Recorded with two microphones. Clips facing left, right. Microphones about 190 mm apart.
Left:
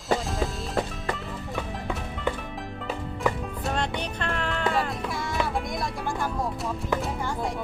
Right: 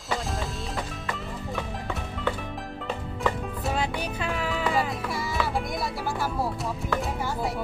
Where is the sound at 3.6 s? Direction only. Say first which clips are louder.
Even; 5° right (ahead or behind).